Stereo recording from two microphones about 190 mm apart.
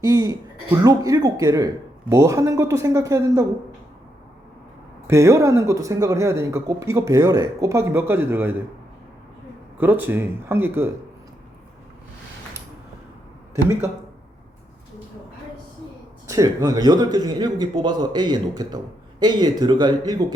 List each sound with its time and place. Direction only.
0.0 s a man's voice: 20° right (ahead or behind)
5.0 s a man's voice: 15° right (ahead or behind)
9.7 s a man's voice: 10° right (ahead or behind)
16.2 s a man's voice: 15° right (ahead or behind)